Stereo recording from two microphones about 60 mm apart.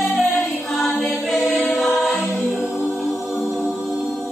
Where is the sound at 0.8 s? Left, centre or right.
Left.